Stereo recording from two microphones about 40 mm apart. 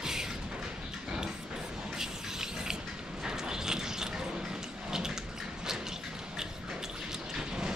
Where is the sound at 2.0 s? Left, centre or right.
Centre.